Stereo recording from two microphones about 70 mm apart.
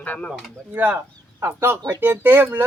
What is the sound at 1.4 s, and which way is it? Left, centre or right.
Speech, right.